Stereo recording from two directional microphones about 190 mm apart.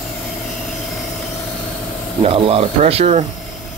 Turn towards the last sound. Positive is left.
turn(degrees=-35)  # may be behind; listen again after turning